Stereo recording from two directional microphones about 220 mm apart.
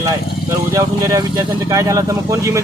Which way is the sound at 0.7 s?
15° right (ahead or behind).